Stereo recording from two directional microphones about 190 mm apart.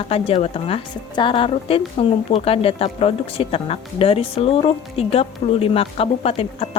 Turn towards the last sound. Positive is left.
turn(degrees=30)  # may be behind; listen again after turning